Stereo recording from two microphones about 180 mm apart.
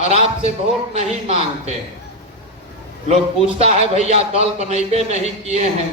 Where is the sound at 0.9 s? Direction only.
35° right (ahead or behind).